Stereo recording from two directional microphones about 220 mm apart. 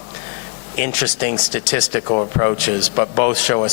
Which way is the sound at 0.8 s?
10° left (ahead or behind).